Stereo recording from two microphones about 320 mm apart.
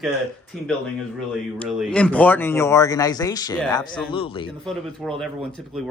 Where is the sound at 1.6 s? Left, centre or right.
Centre.